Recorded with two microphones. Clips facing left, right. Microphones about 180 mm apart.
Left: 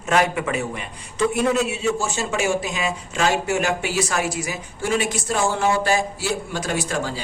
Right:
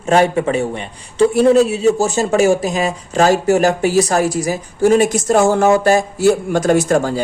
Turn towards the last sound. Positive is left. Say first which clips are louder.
# right 11 dB
turn(degrees=-50)  # may be behind; listen again after turning